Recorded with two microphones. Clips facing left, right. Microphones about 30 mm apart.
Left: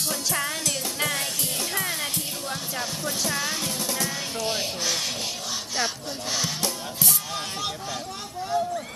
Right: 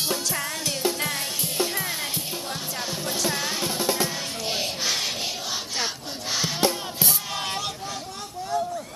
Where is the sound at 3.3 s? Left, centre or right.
Centre.